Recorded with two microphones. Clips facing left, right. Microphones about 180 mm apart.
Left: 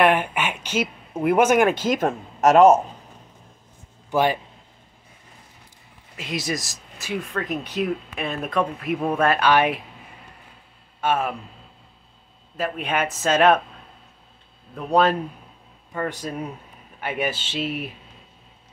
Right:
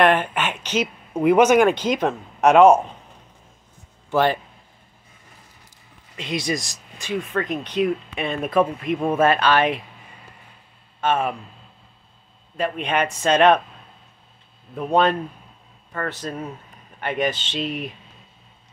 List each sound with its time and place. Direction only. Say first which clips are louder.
0.0 s a sound: right 1 dB; 10° left (ahead or behind)
1.2 s speech: right 3 dB; 5° left (ahead or behind)
2.0 s speech: right 1 dB; 45° left (ahead or behind)
4.1 s a man's voice: right 1 dB; 10° left (ahead or behind)
6.1 s speech: right 2 dB; 5° left (ahead or behind)
9.4 s speech: even; 10° left (ahead or behind)
11.0 s speech: right 1 dB; 5° left (ahead or behind)
12.5 s speech: right 2 dB; 5° left (ahead or behind)
14.7 s speech: even; centre (ahead or behind)